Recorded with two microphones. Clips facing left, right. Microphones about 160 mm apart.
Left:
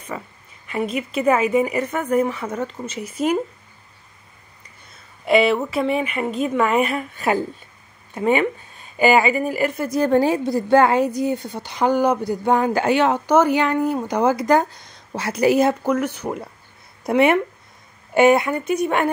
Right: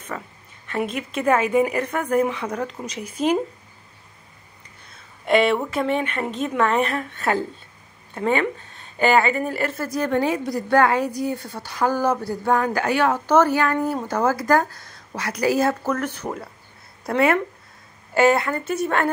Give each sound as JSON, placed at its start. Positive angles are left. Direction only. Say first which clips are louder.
{"t": 0.1, "sound": "a woman's voice", "louder": "left 1 dB", "side_deg": 10}
{"t": 4.9, "sound": "a woman's voice", "louder": "left 2 dB", "side_deg": 5}
{"t": 9.9, "sound": "a woman's voice", "louder": "left 5 dB", "side_deg": 30}